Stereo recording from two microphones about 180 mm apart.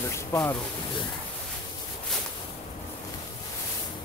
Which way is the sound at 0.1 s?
15° left (ahead or behind).